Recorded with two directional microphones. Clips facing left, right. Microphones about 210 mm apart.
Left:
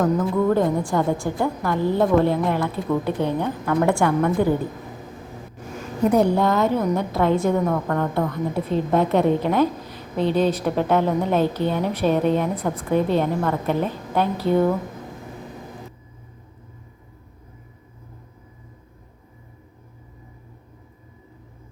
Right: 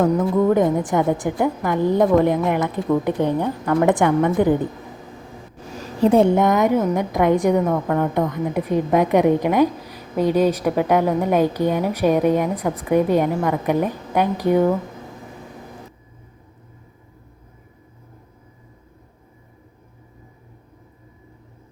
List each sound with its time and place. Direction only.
0.2 s a woman's voice: 20° right (ahead or behind)
6.0 s a woman's voice: 25° right (ahead or behind)